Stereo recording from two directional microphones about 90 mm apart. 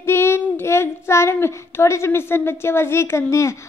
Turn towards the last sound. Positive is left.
turn(degrees=30)  # may be behind; listen again after turning